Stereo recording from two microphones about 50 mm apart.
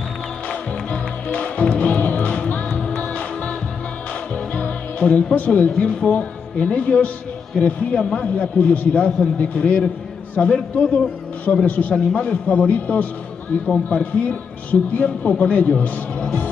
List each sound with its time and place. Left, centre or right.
0.5 s music: left
4.6 s a man's voice: left